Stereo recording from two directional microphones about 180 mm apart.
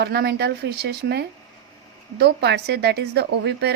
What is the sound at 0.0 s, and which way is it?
A woman's voice, 60° right (ahead or behind).